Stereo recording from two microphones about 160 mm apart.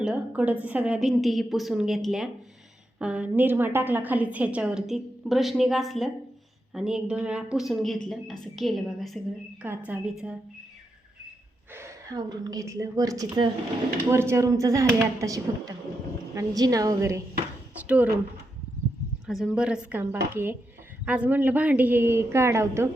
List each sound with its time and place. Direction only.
0.0 s a woman's voice: 10° right (ahead or behind)
9.6 s a woman's voice: 10° right (ahead or behind)
11.7 s a woman's voice: 20° right (ahead or behind)
19.2 s a woman's voice: centre (ahead or behind); by 22.9 s 15° right (ahead or behind)